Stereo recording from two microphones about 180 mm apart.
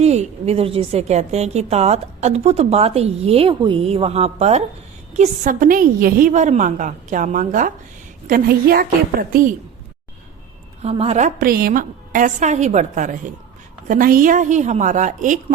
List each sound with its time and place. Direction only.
0.0 s a woman's voice: 35° right (ahead or behind)
8.3 s a woman's voice: 55° right (ahead or behind)
10.8 s a woman's voice: 35° right (ahead or behind)